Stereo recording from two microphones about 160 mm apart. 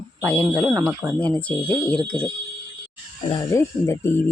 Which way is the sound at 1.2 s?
10° left (ahead or behind).